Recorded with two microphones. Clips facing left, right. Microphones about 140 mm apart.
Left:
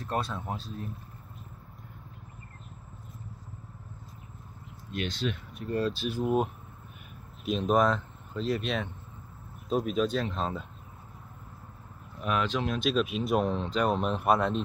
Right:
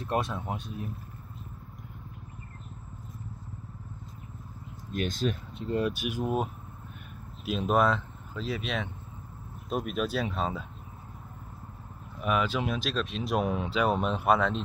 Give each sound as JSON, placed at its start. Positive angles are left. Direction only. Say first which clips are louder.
{"t": 0.0, "sound": "speech", "louder": "right 2 dB", "side_deg": -20}
{"t": 4.9, "sound": "speech", "louder": "right 2 dB", "side_deg": -45}
{"t": 5.5, "sound": "speech", "louder": "right 1 dB", "side_deg": -25}
{"t": 7.4, "sound": "speech", "louder": "left 1 dB", "side_deg": -5}
{"t": 12.2, "sound": "speech", "louder": "right 1 dB", "side_deg": -5}